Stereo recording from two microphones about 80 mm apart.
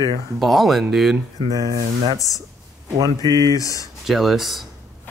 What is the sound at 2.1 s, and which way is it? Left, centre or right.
Speech, left.